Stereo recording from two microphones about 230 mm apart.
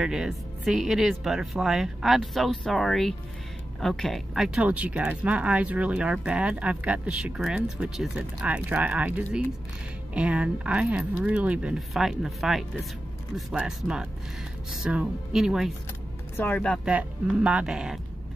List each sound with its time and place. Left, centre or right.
0.0 s speech: centre